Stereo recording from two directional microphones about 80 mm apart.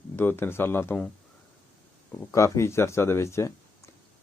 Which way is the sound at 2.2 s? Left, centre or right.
Left.